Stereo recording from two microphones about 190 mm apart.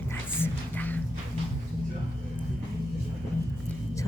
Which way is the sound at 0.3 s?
10° left (ahead or behind).